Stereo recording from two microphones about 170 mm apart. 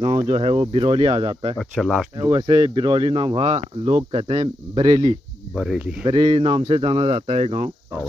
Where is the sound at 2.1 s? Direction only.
25° right (ahead or behind).